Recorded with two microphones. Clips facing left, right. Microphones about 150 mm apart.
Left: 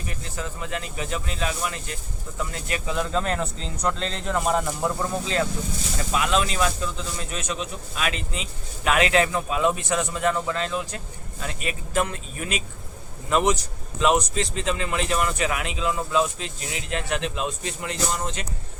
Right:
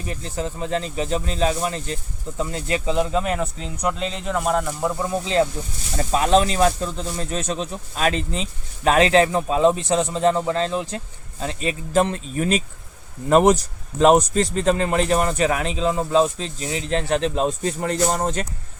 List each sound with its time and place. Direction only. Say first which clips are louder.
0.1 s speech: right 8 dB; 30° right (ahead or behind)
3.2 s speech: right 3 dB; 10° right (ahead or behind)
5.2 s speech: right 8 dB; 25° right (ahead or behind)
6.0 s speech: right 6 dB; 35° right (ahead or behind)